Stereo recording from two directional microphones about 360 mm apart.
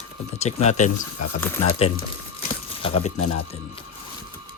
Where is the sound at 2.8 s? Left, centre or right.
Centre.